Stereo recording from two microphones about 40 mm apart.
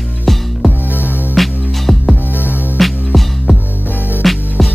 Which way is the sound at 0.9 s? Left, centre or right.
Left.